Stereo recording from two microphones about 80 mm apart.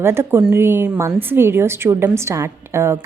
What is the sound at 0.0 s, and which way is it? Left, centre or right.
A woman's voice, right.